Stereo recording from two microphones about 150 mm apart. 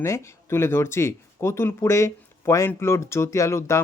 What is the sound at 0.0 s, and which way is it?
Speech, 20° left (ahead or behind).